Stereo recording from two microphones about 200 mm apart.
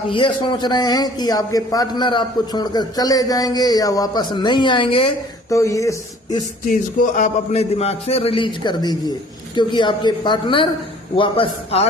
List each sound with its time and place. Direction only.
0.1 s a man's voice: 25° left (ahead or behind)
5.5 s speech: 15° left (ahead or behind)
6.7 s a man's voice: 40° left (ahead or behind)